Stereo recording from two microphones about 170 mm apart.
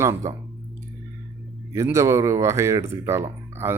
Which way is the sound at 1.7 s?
15° right (ahead or behind).